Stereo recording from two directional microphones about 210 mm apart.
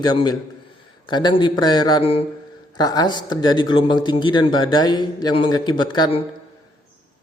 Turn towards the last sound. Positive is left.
turn(degrees=20)  # may be behind; listen again after turning